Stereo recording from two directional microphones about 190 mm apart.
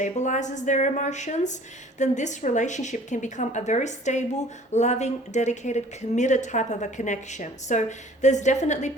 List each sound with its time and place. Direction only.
0.0 s a woman's voice: 40° left (ahead or behind)